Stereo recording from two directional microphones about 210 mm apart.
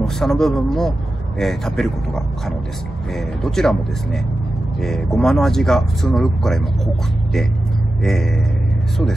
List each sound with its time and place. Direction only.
0.0 s speech: centre (ahead or behind)
8.0 s speech: centre (ahead or behind)